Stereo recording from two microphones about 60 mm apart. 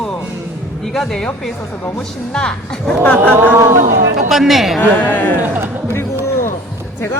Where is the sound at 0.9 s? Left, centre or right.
Centre.